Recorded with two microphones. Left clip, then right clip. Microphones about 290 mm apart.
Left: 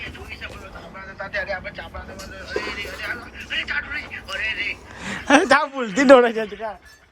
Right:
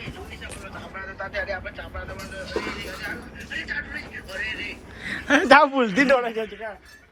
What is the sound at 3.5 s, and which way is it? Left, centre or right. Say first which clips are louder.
Vehicle: left 5 dB; centre.